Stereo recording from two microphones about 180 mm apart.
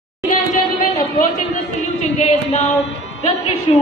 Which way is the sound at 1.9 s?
40° left (ahead or behind).